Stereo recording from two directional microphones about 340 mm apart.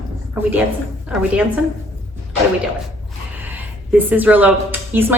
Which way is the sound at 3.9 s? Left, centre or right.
Centre.